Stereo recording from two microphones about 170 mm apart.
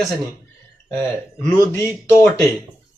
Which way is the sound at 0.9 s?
10° left (ahead or behind).